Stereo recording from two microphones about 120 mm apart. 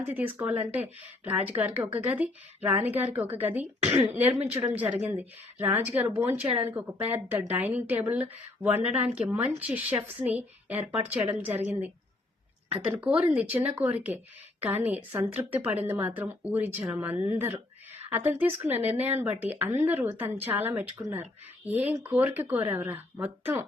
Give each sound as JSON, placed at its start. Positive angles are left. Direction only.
{"t": 0.0, "sound": "a woman's voice", "side_deg": -15}
{"t": 12.8, "sound": "a woman's voice", "side_deg": -10}